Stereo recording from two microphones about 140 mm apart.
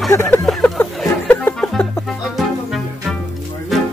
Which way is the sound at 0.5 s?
5° left (ahead or behind).